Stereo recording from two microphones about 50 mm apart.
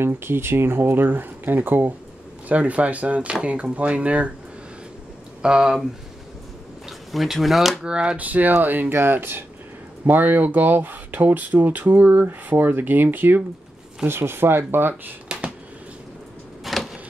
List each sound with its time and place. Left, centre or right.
0.0 s speech: right
2.4 s speech: right
5.4 s speech: centre
6.9 s speech: centre
7.8 s speech: centre
8.2 s speech: right
8.9 s speech: right
10.0 s speech: right
16.6 s a sound: centre